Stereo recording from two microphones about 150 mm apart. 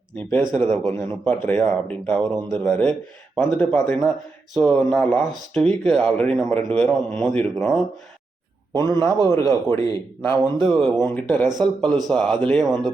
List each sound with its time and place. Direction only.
0.3 s speech: 10° left (ahead or behind)
4.5 s speech: centre (ahead or behind)
8.7 s a man's voice: 20° left (ahead or behind); by 12.8 s centre (ahead or behind)